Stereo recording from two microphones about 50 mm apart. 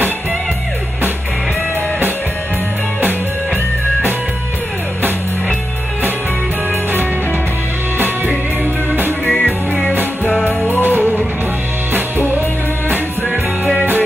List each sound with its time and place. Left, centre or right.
9.3 s music: centre
10.8 s music: right